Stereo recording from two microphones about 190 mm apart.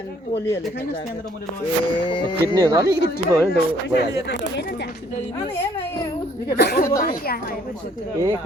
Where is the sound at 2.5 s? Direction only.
20° right (ahead or behind).